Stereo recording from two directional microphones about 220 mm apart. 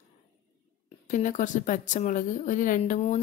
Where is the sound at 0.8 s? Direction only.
35° left (ahead or behind).